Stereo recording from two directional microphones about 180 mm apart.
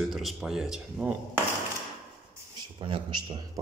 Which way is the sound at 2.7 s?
25° right (ahead or behind).